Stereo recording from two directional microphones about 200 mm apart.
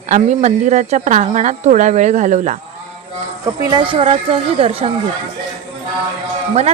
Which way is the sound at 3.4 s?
20° right (ahead or behind).